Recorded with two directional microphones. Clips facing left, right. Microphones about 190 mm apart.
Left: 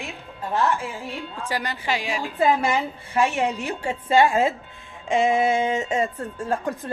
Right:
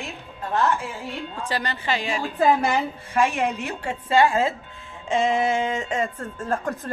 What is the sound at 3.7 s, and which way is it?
Speech, 15° left (ahead or behind).